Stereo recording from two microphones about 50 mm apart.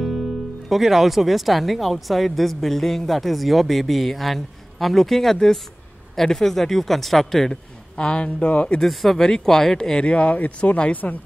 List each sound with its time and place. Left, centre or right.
0.7 s speech: centre
8.0 s speech: left
8.8 s speech: centre
10.0 s speech: left